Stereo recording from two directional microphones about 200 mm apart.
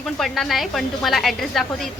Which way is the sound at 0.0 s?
Centre (ahead or behind).